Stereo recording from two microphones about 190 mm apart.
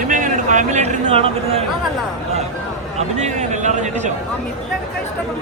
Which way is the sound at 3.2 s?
40° right (ahead or behind).